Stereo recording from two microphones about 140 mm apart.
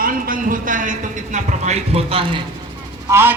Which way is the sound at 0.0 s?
90° right.